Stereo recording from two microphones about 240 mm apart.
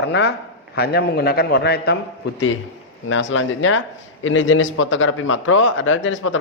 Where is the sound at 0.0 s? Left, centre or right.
Left.